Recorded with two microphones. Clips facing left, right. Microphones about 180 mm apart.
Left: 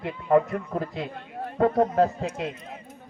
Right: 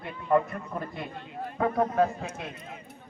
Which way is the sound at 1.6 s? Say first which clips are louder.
Left 4 dB; 40° left (ahead or behind).